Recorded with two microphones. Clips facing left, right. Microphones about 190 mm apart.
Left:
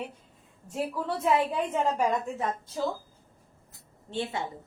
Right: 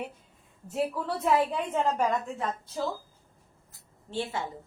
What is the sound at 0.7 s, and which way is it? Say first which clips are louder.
Speech: right 1 dB; centre (ahead or behind).